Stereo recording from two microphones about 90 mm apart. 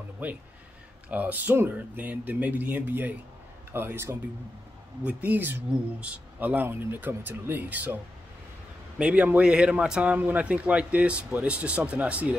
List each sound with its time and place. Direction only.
1.0 s a man's voice: 20° right (ahead or behind)